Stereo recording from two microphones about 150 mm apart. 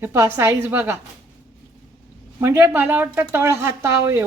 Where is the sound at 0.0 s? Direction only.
15° right (ahead or behind).